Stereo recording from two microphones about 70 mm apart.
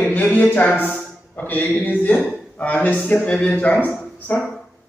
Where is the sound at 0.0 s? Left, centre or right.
Left.